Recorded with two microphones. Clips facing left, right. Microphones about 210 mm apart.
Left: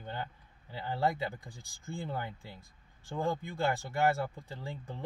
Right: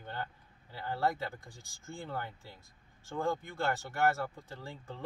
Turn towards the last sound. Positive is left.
turn(degrees=15)  # may be behind; listen again after turning